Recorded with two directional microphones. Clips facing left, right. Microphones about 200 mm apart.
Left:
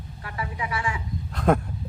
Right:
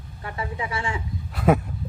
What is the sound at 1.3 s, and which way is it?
Speech, 5° right (ahead or behind).